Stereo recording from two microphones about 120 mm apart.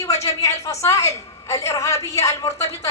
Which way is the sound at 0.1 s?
65° left (ahead or behind).